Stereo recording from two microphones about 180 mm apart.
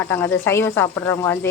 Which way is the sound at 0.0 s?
10° left (ahead or behind).